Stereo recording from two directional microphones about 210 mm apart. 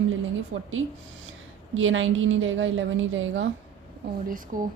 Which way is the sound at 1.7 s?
70° right (ahead or behind).